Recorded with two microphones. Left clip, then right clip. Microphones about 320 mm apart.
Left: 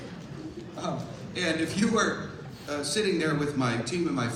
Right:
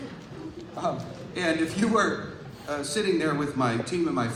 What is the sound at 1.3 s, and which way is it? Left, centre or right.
A man's voice, centre.